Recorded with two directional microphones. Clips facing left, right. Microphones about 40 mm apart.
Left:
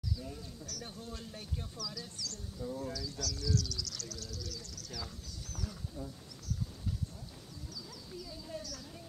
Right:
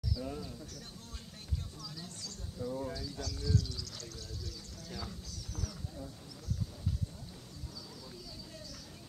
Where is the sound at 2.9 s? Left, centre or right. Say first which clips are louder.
Left 1 dB; right.